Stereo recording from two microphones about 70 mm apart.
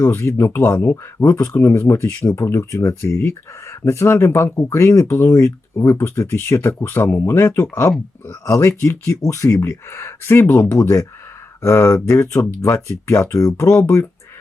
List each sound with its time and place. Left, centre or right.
0.0 s speech: left